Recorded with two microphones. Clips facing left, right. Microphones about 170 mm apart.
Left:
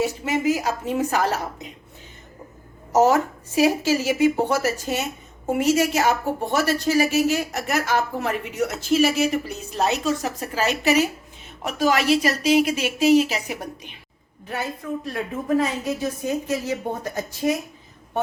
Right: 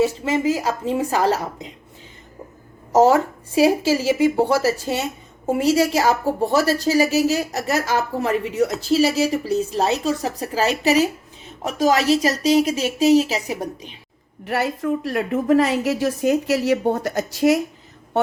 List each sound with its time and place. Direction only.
0.0 s a woman's voice: 30° right (ahead or behind)
2.9 s a woman's voice: 30° right (ahead or behind)
5.8 s a woman's voice: 35° right (ahead or behind)
14.4 s a woman's voice: 80° right